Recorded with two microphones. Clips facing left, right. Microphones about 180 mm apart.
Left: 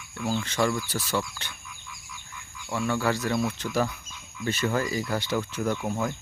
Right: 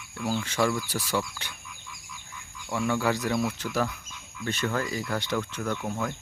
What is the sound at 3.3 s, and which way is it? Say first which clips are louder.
Speech: left 1 dB; 5° right (ahead or behind).